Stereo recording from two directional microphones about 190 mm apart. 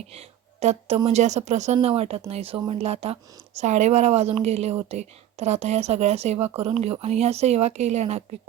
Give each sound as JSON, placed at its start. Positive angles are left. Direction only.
{"t": 0.1, "sound": "a woman's voice", "side_deg": -35}